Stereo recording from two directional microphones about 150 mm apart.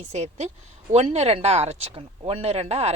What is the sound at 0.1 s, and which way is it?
Speech, 50° right (ahead or behind).